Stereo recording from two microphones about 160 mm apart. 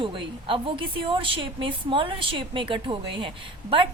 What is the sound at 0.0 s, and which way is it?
A woman's voice, 30° right (ahead or behind).